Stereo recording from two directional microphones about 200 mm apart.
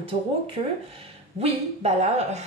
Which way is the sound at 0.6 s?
25° right (ahead or behind).